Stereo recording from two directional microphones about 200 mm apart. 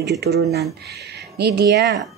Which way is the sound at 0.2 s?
55° right (ahead or behind).